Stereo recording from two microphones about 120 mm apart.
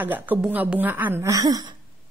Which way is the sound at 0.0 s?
15° right (ahead or behind).